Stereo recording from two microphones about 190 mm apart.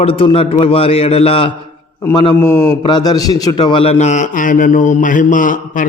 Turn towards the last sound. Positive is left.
turn(degrees=45)  # may be behind; listen again after turning